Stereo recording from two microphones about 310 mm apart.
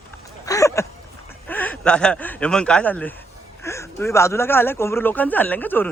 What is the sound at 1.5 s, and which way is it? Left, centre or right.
A man's voice, centre.